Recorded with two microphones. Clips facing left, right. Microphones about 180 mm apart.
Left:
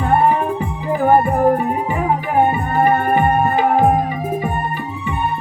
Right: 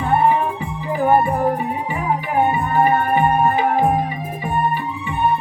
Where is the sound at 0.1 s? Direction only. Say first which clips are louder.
Left 1 dB; 45° left (ahead or behind).